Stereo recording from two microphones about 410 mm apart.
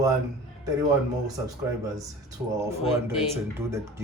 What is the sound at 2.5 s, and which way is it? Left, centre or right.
Speech, centre.